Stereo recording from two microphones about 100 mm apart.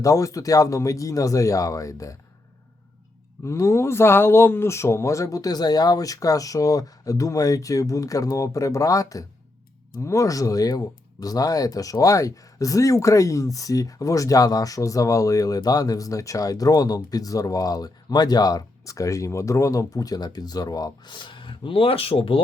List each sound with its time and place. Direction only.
0.0 s speech: 35° left (ahead or behind)
3.4 s speech: 30° left (ahead or behind)
21.2 s speech: 55° left (ahead or behind)